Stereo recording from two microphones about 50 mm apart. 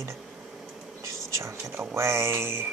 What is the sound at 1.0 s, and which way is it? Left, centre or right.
Speech, right.